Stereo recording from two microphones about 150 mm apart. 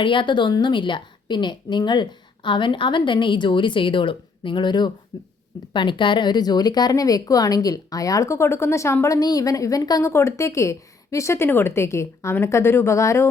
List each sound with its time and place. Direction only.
0.0 s a woman's voice: 35° left (ahead or behind)
5.7 s speech: 30° left (ahead or behind)